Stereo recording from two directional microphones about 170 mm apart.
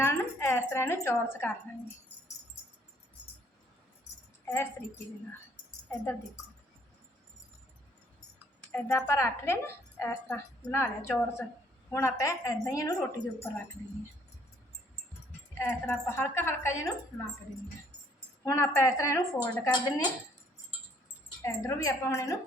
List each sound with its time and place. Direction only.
0.0 s speech: 15° left (ahead or behind)
4.4 s speech: 15° left (ahead or behind)
5.9 s a woman's voice: 15° left (ahead or behind)
8.7 s a woman's voice: 15° left (ahead or behind)
15.5 s a woman's voice: 15° left (ahead or behind)
18.4 s a woman's voice: 15° left (ahead or behind)
21.4 s a woman's voice: 15° left (ahead or behind)